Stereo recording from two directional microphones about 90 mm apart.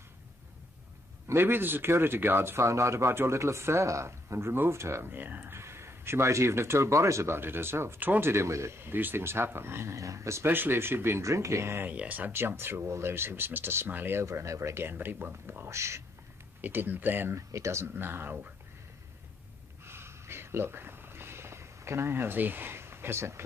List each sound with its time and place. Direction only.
1.2 s a man's voice: 25° right (ahead or behind)
16.6 s a man's voice: 20° right (ahead or behind)
17.5 s a man's voice: 35° right (ahead or behind)
19.8 s a sound: 25° right (ahead or behind)